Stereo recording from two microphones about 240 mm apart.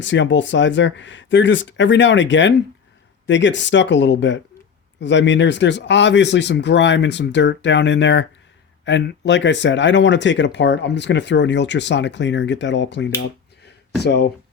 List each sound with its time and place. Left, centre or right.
0.0 s speech: left